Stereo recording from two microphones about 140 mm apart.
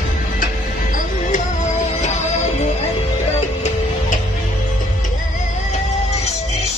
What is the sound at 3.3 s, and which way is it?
Music, 55° left (ahead or behind).